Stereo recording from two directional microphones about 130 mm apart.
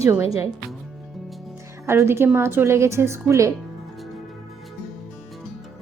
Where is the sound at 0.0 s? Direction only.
20° right (ahead or behind).